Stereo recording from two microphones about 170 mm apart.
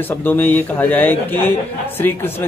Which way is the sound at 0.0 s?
10° left (ahead or behind).